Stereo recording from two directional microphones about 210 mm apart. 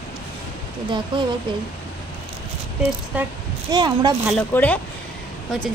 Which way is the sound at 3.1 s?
5° right (ahead or behind).